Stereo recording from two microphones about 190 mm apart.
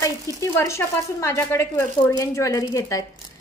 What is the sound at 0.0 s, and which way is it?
Speech, 15° left (ahead or behind).